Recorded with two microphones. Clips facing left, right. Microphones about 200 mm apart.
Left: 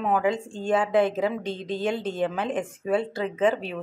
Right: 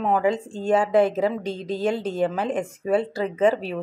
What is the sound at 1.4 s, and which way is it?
Speech, 35° right (ahead or behind).